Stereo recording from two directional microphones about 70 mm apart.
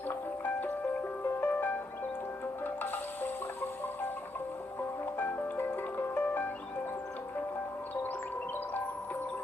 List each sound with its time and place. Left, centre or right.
1.4 s music: left
2.8 s music: left
5.1 s music: left